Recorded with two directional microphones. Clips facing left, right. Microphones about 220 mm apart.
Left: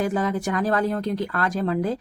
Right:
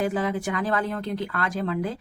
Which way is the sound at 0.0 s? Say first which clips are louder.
Left 2 dB; 45° left (ahead or behind).